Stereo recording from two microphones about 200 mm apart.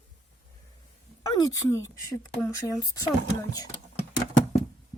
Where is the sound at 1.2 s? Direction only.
20° left (ahead or behind).